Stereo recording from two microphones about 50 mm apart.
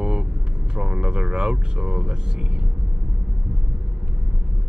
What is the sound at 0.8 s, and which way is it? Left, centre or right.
Speech, centre.